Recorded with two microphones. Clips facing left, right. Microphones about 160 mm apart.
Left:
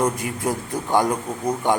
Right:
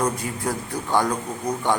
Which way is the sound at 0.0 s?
20° left (ahead or behind).